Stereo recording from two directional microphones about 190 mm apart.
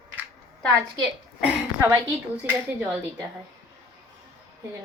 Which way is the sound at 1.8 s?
15° right (ahead or behind).